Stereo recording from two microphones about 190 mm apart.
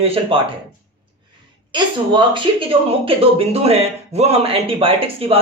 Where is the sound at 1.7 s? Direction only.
25° right (ahead or behind).